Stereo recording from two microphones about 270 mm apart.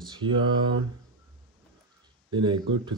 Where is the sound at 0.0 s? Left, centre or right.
Centre.